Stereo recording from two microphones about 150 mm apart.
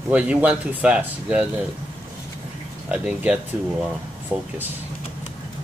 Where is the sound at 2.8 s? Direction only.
10° right (ahead or behind).